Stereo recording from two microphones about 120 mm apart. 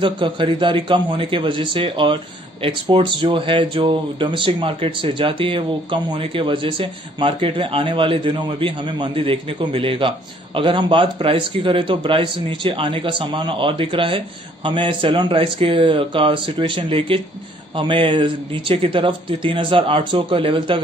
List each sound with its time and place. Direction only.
0.0 s speech: 45° right (ahead or behind)